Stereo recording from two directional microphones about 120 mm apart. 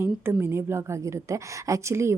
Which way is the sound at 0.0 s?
20° right (ahead or behind).